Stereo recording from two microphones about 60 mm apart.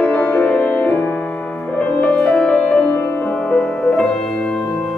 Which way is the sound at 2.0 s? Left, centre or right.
Left.